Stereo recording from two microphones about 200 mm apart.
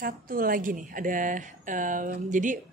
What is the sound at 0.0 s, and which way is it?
A woman's voice, 45° right (ahead or behind).